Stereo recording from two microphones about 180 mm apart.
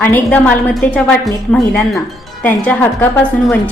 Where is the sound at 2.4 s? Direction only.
10° left (ahead or behind).